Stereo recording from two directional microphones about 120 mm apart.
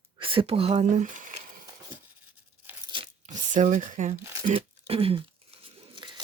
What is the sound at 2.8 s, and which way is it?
Crunch, 45° right (ahead or behind).